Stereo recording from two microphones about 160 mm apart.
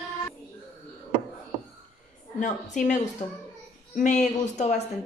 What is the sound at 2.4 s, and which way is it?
A woman's voice, 50° left (ahead or behind).